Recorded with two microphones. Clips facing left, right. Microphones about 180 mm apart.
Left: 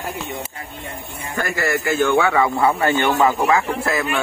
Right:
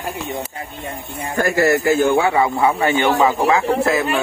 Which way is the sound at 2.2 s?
20° right (ahead or behind).